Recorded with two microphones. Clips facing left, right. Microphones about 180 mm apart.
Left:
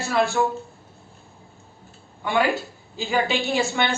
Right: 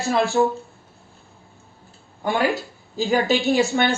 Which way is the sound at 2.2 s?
45° right (ahead or behind).